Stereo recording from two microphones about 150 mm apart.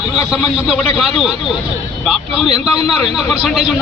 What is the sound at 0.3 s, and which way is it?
A man's voice, centre (ahead or behind).